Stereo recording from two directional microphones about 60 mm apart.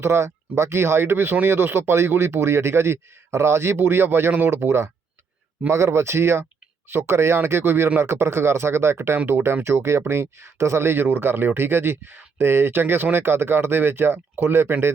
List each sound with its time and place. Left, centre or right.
0.0 s speech: right